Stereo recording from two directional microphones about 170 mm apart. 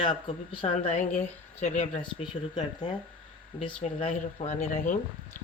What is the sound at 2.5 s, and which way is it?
Speech, 25° left (ahead or behind).